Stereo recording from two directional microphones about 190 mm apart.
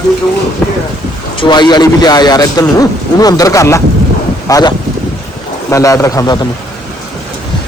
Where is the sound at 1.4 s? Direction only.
20° left (ahead or behind).